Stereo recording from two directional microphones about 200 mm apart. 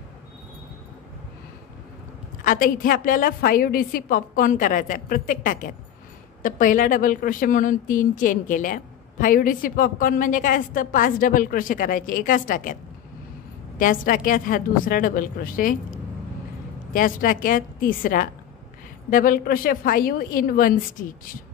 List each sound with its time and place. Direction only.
2.4 s a woman's voice: 45° left (ahead or behind)
13.7 s a woman's voice: 45° left (ahead or behind)
16.9 s a woman's voice: 45° left (ahead or behind)